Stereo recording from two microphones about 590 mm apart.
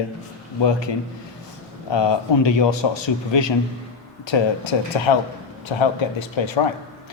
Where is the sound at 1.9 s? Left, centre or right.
Left.